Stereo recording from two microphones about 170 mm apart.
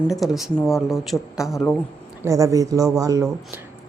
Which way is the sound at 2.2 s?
20° right (ahead or behind).